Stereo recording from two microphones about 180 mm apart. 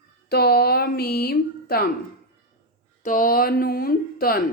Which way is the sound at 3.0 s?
50° left (ahead or behind).